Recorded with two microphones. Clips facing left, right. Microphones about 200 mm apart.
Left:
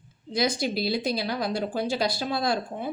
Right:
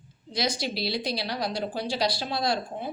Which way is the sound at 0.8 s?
50° left (ahead or behind).